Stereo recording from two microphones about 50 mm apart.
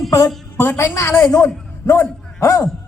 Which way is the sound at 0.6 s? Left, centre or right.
Left.